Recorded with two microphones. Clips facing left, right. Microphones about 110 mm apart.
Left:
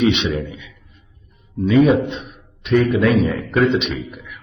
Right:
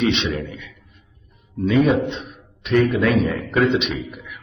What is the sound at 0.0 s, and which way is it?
A man's voice, 10° left (ahead or behind).